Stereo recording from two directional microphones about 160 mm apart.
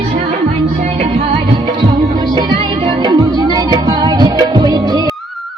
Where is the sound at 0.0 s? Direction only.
40° right (ahead or behind); by 5.0 s 25° right (ahead or behind).